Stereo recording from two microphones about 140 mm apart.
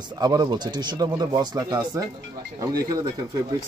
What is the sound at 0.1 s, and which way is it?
Speech, 30° right (ahead or behind).